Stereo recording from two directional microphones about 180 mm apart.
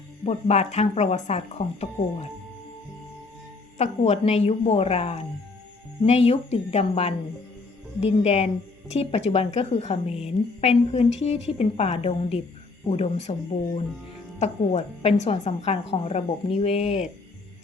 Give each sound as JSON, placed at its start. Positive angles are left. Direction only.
{"t": 0.3, "sound": "a woman's voice", "side_deg": 35}
{"t": 3.8, "sound": "a woman's voice", "side_deg": 35}
{"t": 14.3, "sound": "a woman's voice", "side_deg": 40}